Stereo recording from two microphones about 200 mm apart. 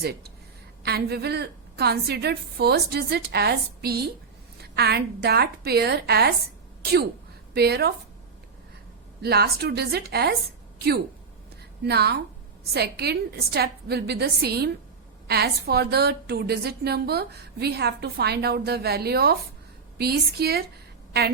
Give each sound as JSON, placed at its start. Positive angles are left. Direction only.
{"t": 0.0, "sound": "a woman's voice", "side_deg": -50}
{"t": 7.5, "sound": "a woman's voice", "side_deg": -55}
{"t": 9.2, "sound": "a woman's voice", "side_deg": -55}